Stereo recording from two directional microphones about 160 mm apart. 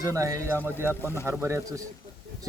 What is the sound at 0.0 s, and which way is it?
Speech, 20° right (ahead or behind).